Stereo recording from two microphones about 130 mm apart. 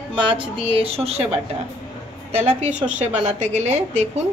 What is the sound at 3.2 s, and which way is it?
Speech, 60° right (ahead or behind).